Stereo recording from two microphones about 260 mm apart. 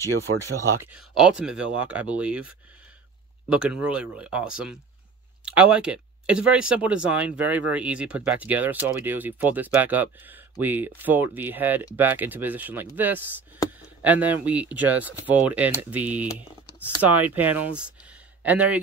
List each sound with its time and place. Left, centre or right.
0.9 s speech: centre